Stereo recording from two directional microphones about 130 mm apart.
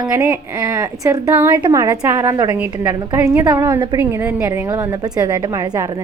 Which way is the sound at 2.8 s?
15° right (ahead or behind).